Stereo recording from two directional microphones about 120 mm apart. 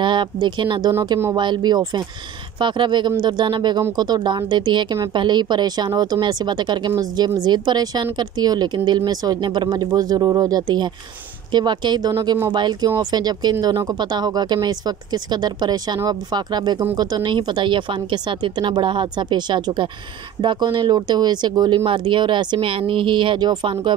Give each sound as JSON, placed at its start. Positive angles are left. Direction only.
{"t": 0.0, "sound": "a woman's voice", "side_deg": -40}